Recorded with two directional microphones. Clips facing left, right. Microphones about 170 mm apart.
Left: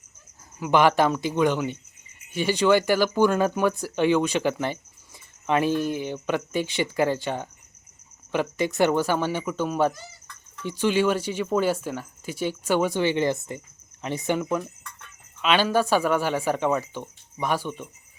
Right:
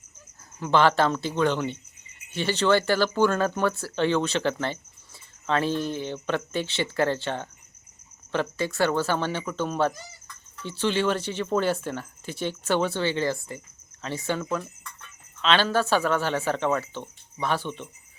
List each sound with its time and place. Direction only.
0.6 s speech: 15° left (ahead or behind)